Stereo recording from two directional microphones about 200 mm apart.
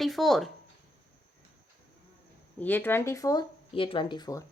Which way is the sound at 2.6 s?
10° left (ahead or behind).